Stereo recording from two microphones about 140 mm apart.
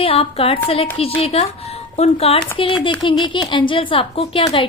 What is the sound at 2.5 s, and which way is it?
A woman's voice, 35° left (ahead or behind).